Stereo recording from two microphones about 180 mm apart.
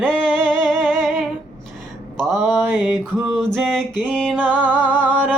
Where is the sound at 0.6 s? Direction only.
5° left (ahead or behind).